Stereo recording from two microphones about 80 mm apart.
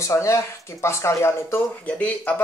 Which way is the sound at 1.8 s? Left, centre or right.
Centre.